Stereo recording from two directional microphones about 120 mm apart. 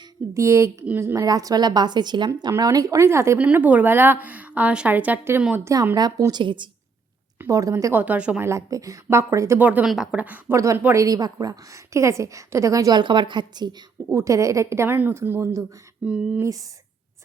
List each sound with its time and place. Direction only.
0.3 s a woman's voice: 25° right (ahead or behind)
3.3 s a woman's voice: 10° right (ahead or behind)
5.6 s a woman's voice: 20° right (ahead or behind)
6.4 s a woman's voice: 45° right (ahead or behind)
7.4 s a woman's voice: 25° right (ahead or behind)
8.0 s a woman's voice: 15° right (ahead or behind)
8.4 s a woman's voice: 25° right (ahead or behind)
9.6 s a woman's voice: 15° right (ahead or behind)
9.8 s a woman's voice: 5° right (ahead or behind)
11.0 s a woman's voice: 30° right (ahead or behind)
14.1 s a woman's voice: 25° right (ahead or behind)
16.0 s a woman's voice: 10° right (ahead or behind)